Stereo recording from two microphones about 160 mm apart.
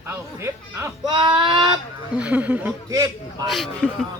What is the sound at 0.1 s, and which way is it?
Speech, 15° right (ahead or behind).